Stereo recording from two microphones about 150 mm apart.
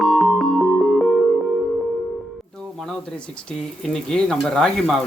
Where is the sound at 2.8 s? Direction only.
5° left (ahead or behind).